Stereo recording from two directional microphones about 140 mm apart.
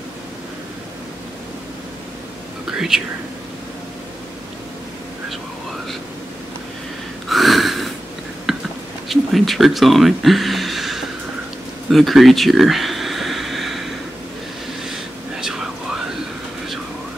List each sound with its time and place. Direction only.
7.2 s snort: centre (ahead or behind)
8.5 s whispering: centre (ahead or behind)
9.1 s speech: centre (ahead or behind)
11.9 s a sound: centre (ahead or behind)
14.9 s whispering: 5° right (ahead or behind)